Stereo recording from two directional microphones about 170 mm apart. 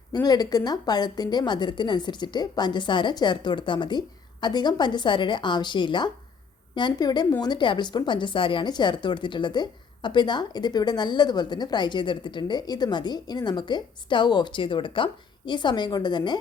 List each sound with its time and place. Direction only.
0.1 s a woman's voice: 25° left (ahead or behind)